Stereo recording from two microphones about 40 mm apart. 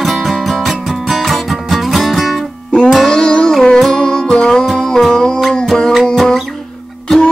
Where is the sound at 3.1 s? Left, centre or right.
Left.